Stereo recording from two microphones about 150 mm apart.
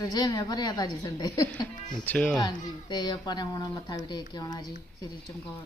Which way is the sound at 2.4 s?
30° left (ahead or behind).